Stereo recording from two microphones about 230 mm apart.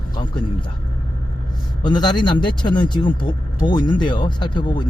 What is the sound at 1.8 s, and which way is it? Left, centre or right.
Speech, centre.